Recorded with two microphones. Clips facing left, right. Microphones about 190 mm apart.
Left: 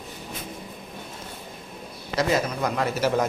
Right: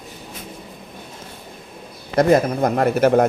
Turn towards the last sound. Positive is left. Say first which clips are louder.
# right 8 dB
turn(degrees=-55)  # may be behind; listen again after turning